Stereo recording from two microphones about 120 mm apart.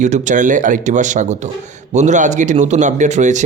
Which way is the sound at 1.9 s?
80° right.